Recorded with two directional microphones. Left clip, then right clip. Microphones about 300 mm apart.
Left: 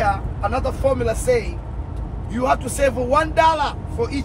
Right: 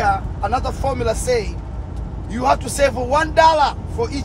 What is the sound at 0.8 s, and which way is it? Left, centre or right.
A man's voice, centre.